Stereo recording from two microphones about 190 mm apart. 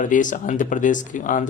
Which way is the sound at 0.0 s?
45° left (ahead or behind).